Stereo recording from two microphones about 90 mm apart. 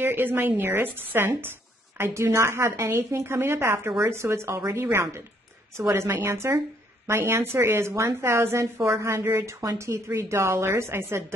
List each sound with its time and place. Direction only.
0.0 s a woman's voice: 20° right (ahead or behind)